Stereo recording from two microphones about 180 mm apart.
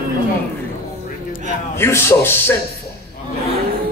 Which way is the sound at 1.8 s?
15° left (ahead or behind).